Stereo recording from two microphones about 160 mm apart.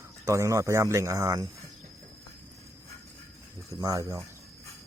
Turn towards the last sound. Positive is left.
turn(degrees=-20)  # may be behind; listen again after turning